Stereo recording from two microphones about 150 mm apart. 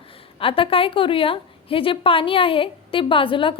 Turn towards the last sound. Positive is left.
turn(degrees=35)  # may be behind; listen again after turning